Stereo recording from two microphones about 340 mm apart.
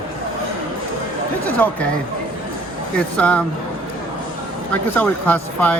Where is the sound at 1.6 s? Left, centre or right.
Centre.